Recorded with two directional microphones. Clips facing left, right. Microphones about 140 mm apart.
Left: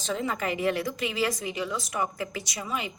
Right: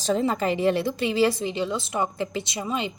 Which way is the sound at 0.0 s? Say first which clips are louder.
Right 6 dB; 35° right (ahead or behind).